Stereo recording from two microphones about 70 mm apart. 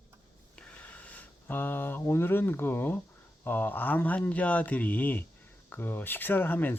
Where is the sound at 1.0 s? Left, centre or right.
Left.